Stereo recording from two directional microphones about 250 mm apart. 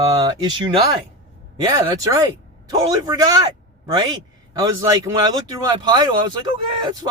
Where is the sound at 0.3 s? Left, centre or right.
Centre.